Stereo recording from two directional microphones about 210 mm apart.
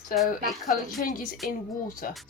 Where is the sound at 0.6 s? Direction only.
40° left (ahead or behind).